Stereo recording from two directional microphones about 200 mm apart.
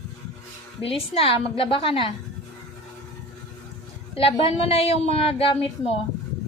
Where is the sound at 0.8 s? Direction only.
30° left (ahead or behind).